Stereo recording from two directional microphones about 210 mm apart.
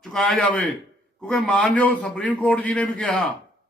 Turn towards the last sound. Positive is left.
turn(degrees=5)  # may be behind; listen again after turning